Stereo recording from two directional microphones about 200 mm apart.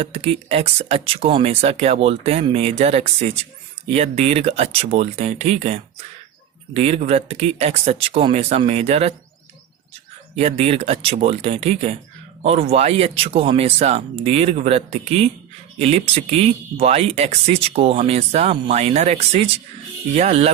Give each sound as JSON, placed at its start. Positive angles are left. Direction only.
{"t": 0.0, "sound": "speech", "side_deg": -30}
{"t": 10.6, "sound": "speech", "side_deg": -30}